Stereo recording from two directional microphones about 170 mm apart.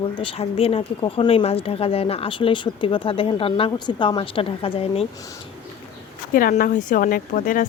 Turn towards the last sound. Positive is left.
turn(degrees=50)  # may be behind; listen again after turning